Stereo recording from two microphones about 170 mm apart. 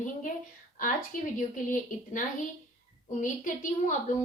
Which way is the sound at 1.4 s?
50° left (ahead or behind).